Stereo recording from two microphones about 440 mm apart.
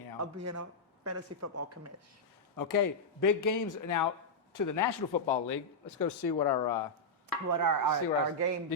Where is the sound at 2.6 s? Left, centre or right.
Left.